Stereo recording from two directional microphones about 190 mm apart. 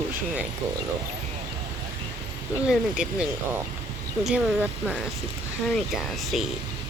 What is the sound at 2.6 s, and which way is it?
Speech, 5° right (ahead or behind).